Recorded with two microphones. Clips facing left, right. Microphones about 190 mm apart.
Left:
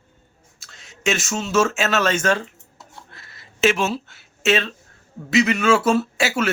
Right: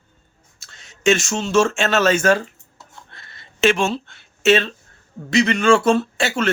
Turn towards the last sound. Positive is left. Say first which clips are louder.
# even
turn(degrees=5)  # may be behind; listen again after turning